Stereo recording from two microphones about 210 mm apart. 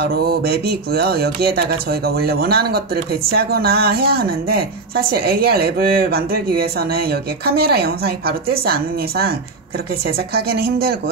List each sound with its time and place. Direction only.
0.0 s speech: 50° right (ahead or behind)